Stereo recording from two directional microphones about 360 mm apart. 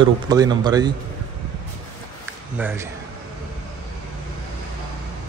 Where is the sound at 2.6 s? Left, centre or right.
Centre.